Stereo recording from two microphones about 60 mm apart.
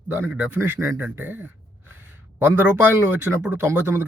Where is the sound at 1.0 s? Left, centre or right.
Right.